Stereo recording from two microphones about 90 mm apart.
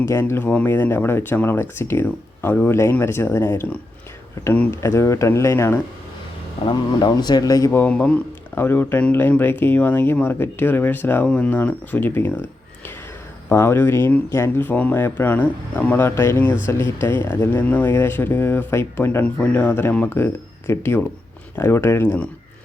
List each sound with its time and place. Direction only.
0.0 s speech: 30° left (ahead or behind)
6.7 s speech: 55° left (ahead or behind)
7.7 s speech: 20° left (ahead or behind)
7.9 s speech: 10° left (ahead or behind)
8.5 s speech: 25° left (ahead or behind)
13.5 s speech: 25° left (ahead or behind)